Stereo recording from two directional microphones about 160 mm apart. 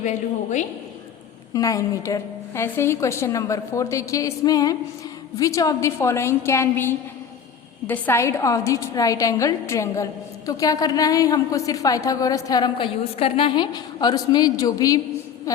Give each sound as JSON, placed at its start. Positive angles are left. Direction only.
{"t": 1.5, "sound": "a woman's voice", "side_deg": 20}